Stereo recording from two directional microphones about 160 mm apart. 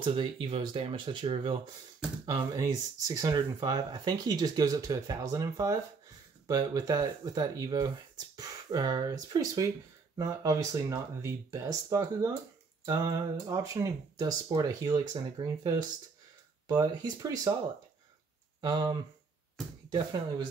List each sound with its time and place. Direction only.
0.0 s speech: 30° right (ahead or behind)
18.6 s speech: 25° right (ahead or behind)